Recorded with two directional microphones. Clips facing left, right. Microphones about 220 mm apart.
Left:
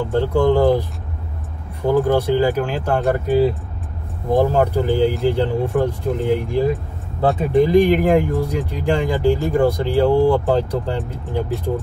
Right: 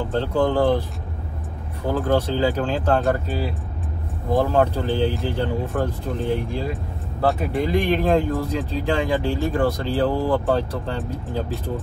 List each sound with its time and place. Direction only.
0.1 s speech: 15° left (ahead or behind)
2.0 s speech: 15° left (ahead or behind)